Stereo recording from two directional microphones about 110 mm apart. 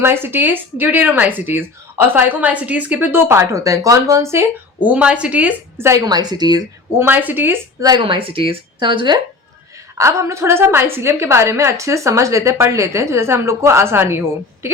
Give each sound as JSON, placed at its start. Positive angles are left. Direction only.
{"t": 0.0, "sound": "a woman's voice", "side_deg": -20}
{"t": 4.9, "sound": "a woman's voice", "side_deg": -10}
{"t": 6.1, "sound": "a woman's voice", "side_deg": -40}
{"t": 7.0, "sound": "a woman's voice", "side_deg": -15}
{"t": 7.8, "sound": "a woman's voice", "side_deg": -35}
{"t": 8.0, "sound": "speech", "side_deg": -55}
{"t": 10.0, "sound": "a woman's voice", "side_deg": -25}